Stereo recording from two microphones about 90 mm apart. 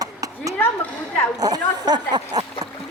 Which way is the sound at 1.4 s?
45° right (ahead or behind).